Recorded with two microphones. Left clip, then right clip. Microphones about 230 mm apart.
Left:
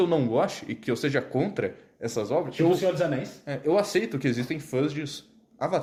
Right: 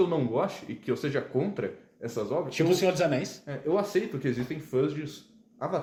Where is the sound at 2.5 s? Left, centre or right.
Right.